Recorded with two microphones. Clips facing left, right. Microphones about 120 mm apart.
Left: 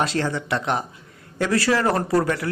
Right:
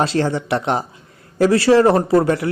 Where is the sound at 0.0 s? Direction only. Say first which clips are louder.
Right 5 dB; 30° right (ahead or behind).